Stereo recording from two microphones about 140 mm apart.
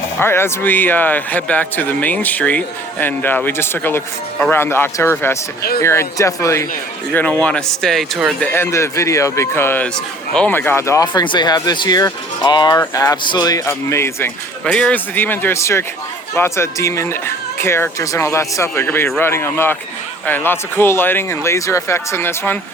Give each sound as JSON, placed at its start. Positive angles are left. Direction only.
{"t": 0.2, "sound": "a man's voice", "side_deg": 15}
{"t": 7.1, "sound": "a man's voice", "side_deg": 10}
{"t": 8.4, "sound": "speech", "side_deg": 15}
{"t": 14.6, "sound": "a man's voice", "side_deg": 5}